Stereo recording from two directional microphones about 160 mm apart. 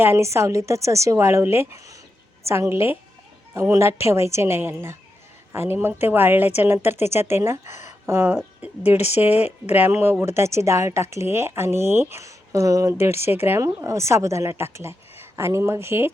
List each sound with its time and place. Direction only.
0.0 s a woman's voice: 15° right (ahead or behind)
7.9 s a sound: 15° right (ahead or behind)
9.0 s speech: 40° left (ahead or behind)
9.7 s speech: 15° right (ahead or behind)